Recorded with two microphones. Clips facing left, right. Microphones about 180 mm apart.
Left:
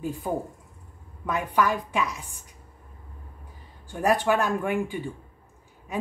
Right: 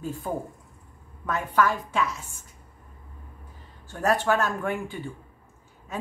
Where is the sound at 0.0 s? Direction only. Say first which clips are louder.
Left 2 dB; 15° left (ahead or behind).